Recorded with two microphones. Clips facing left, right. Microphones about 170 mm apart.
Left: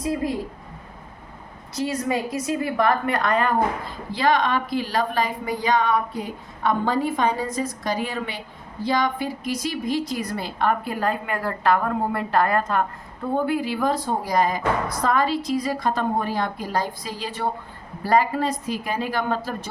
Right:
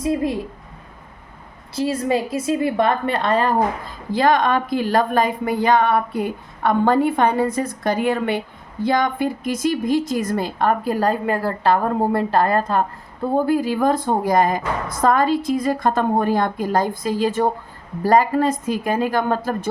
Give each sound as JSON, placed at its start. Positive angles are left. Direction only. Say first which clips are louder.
{"t": 0.0, "sound": "a woman's voice", "louder": "right 4 dB", "side_deg": -25}
{"t": 1.7, "sound": "a woman's voice", "louder": "right 4 dB", "side_deg": -30}
{"t": 4.1, "sound": "a woman's voice", "louder": "right 4 dB", "side_deg": -50}